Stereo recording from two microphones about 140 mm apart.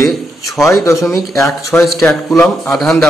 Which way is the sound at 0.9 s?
20° left (ahead or behind).